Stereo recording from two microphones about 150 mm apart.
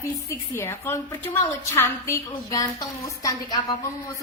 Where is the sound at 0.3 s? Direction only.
15° left (ahead or behind).